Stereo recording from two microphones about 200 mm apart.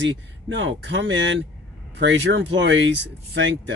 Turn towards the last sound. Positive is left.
turn(degrees=-65)  # may be behind; listen again after turning